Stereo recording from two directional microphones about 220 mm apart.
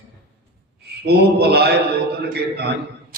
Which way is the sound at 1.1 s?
45° right (ahead or behind).